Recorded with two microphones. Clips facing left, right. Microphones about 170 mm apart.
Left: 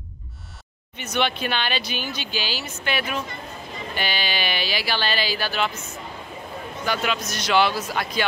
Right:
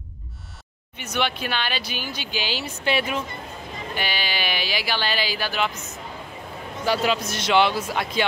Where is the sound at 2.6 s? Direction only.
30° right (ahead or behind).